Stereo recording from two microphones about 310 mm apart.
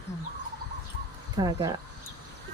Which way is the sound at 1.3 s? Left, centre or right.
Centre.